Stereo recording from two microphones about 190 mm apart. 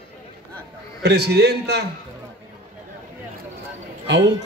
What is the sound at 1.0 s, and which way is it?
Speech, 60° right (ahead or behind).